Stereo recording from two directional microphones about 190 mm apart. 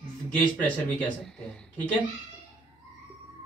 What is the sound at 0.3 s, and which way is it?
Speech, 10° left (ahead or behind).